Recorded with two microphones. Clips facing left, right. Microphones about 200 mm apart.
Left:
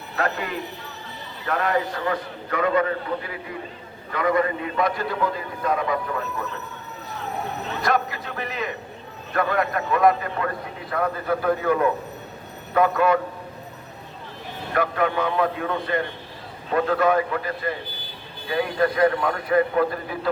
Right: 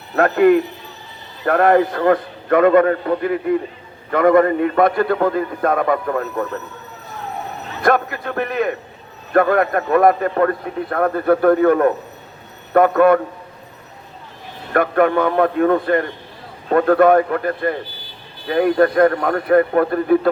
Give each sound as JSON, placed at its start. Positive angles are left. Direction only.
{"t": 0.2, "sound": "a man's voice", "side_deg": -55}
{"t": 7.8, "sound": "a man's voice", "side_deg": -55}
{"t": 14.7, "sound": "a man's voice", "side_deg": -55}